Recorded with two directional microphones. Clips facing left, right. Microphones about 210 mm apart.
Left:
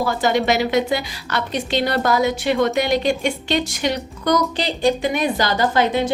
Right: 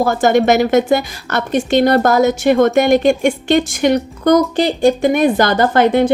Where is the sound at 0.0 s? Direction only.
50° right (ahead or behind).